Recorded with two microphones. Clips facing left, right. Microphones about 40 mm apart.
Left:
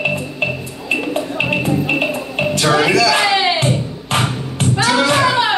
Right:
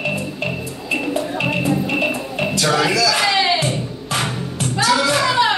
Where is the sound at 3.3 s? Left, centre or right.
Centre.